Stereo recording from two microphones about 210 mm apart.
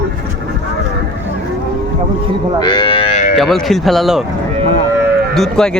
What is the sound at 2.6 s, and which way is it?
Livestock, 20° left (ahead or behind).